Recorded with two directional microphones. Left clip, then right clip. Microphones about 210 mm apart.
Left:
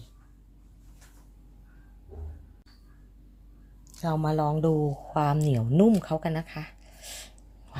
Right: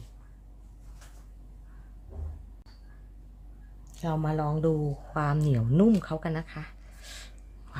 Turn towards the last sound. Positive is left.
turn(degrees=15)  # may be behind; listen again after turning